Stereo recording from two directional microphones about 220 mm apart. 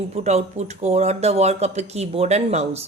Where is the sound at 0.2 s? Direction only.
30° right (ahead or behind).